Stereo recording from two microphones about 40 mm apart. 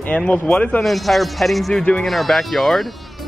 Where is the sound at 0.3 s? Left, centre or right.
Left.